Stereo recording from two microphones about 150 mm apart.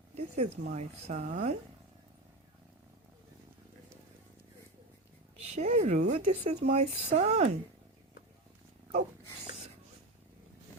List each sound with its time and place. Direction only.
0.2 s a sound: 45° right (ahead or behind)
0.6 s speech: 65° right (ahead or behind)
5.4 s speech: 45° right (ahead or behind)